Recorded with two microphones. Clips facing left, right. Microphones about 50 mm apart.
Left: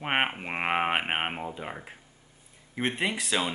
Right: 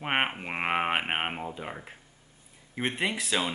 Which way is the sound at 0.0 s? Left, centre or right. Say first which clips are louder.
Left 1 dB; centre.